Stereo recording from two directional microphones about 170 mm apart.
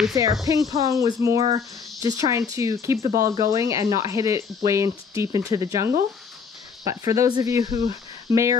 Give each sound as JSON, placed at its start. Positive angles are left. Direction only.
{"t": 0.1, "sound": "speech", "side_deg": -20}